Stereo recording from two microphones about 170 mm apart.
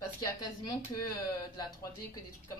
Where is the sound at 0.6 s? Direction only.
25° left (ahead or behind).